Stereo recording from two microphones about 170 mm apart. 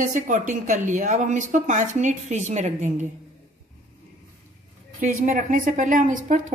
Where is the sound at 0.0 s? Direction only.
50° right (ahead or behind).